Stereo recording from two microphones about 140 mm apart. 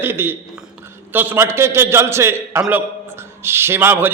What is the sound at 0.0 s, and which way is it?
A man's voice, 15° right (ahead or behind).